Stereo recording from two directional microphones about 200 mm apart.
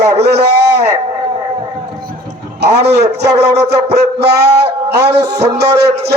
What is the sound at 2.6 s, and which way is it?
A man's voice, 55° right (ahead or behind).